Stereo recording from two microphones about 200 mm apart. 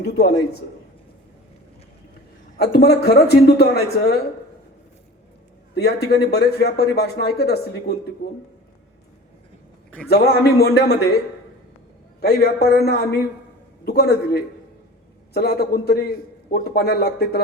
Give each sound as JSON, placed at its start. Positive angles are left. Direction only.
{"t": 0.0, "sound": "a man's voice", "side_deg": 55}
{"t": 2.6, "sound": "speech", "side_deg": 55}
{"t": 5.7, "sound": "speech", "side_deg": 55}
{"t": 10.1, "sound": "speech", "side_deg": 50}
{"t": 12.2, "sound": "speech", "side_deg": 50}